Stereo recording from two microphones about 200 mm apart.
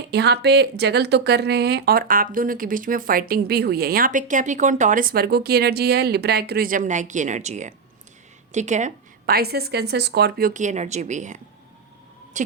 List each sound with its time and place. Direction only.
0.1 s speech: 55° right (ahead or behind); by 11.3 s 35° right (ahead or behind)